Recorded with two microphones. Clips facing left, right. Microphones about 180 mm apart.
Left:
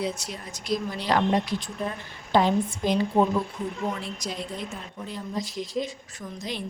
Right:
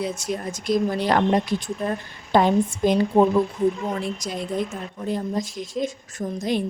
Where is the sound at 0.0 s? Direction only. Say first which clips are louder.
Right 5 dB; 50° right (ahead or behind).